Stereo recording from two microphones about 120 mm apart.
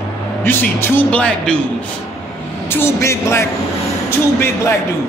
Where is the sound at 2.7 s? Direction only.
20° left (ahead or behind).